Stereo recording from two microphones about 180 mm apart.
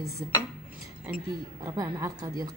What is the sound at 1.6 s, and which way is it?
Speech, 20° right (ahead or behind).